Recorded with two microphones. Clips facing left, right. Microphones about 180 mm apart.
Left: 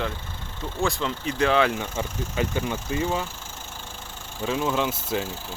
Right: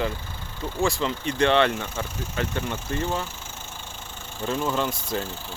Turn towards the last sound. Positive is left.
turn(degrees=5)  # may be behind; listen again after turning